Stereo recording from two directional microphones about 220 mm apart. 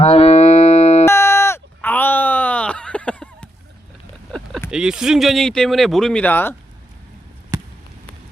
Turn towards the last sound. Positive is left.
turn(degrees=-15)  # may be behind; listen again after turning